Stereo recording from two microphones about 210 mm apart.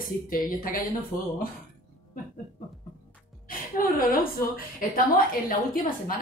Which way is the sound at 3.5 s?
40° left (ahead or behind).